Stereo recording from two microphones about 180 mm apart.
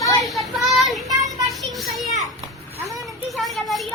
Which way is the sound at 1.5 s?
Centre (ahead or behind).